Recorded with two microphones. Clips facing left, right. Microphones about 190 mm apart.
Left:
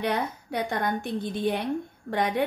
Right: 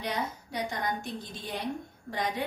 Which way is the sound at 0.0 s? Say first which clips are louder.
Left 6 dB; 60° left (ahead or behind).